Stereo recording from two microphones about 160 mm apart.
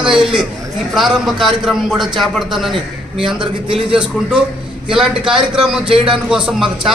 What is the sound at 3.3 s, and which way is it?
Speech, 35° right (ahead or behind).